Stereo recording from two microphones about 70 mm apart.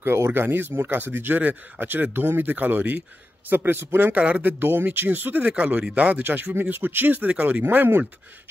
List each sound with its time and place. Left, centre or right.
0.0 s speech: right; by 7.6 s centre
7.6 s speech: right